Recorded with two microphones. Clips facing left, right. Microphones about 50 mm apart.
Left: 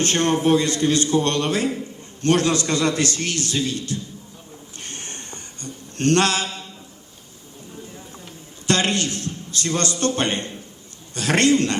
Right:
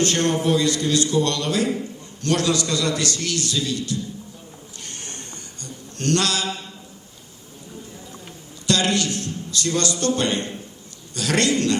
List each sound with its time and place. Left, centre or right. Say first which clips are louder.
0.0 s a man's voice: left 1 dB; left
4.8 s a sound: left 1 dB; left
8.6 s a man's voice: even; left